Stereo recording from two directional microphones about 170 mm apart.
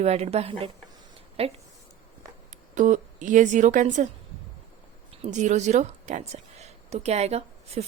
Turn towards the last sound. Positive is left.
turn(degrees=-40)  # may be behind; listen again after turning